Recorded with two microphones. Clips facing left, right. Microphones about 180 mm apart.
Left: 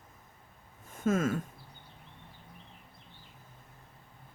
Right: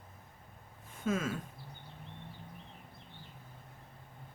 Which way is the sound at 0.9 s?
45° left (ahead or behind).